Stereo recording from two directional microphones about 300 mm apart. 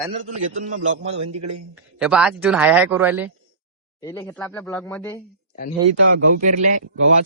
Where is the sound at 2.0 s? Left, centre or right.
Centre.